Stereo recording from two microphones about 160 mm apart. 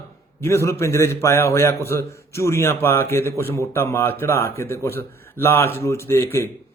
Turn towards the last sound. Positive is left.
turn(degrees=15)  # may be behind; listen again after turning